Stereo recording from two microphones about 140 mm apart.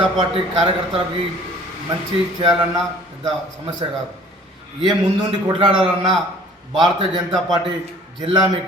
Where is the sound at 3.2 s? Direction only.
40° right (ahead or behind).